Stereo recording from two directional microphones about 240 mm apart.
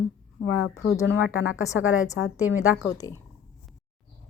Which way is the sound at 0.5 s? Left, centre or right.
Left.